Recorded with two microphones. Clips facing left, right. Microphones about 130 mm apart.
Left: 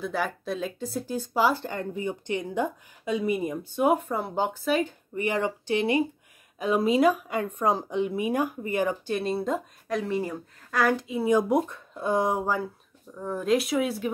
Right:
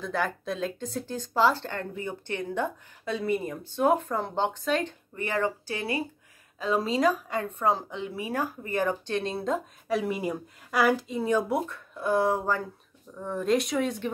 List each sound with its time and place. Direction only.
0.0 s speech: 5° left (ahead or behind)
11.1 s speech: 15° left (ahead or behind)
13.1 s speech: centre (ahead or behind)